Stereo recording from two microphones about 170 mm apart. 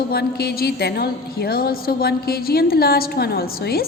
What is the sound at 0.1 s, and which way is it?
A woman's voice, 65° left (ahead or behind).